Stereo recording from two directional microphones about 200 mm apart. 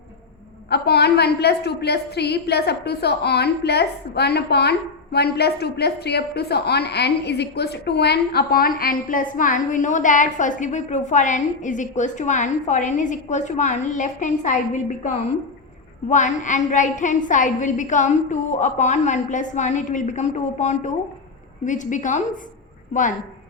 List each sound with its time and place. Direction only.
0.7 s a woman's voice: 55° left (ahead or behind)